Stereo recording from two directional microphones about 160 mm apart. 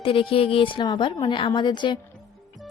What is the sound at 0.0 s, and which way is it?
A woman's voice, 35° left (ahead or behind).